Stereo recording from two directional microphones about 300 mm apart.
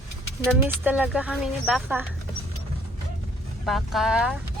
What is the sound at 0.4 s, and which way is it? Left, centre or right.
Speech, centre.